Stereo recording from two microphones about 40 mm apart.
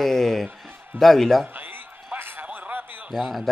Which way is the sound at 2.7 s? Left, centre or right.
Right.